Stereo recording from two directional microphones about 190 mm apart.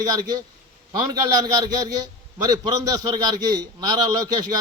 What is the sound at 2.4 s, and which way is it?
A man's voice, 20° right (ahead or behind).